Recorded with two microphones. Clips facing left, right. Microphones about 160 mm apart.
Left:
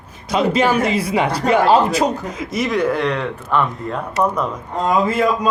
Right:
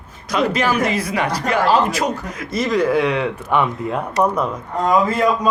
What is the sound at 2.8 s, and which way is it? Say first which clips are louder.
Speech: right 3 dB; 5° right (ahead or behind).